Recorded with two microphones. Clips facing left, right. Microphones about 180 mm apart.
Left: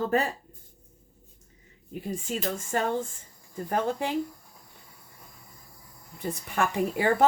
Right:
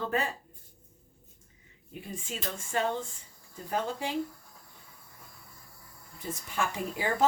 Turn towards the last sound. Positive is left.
turn(degrees=60)  # may be behind; listen again after turning